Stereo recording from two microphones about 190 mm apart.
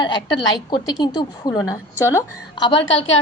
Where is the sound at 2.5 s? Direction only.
25° left (ahead or behind).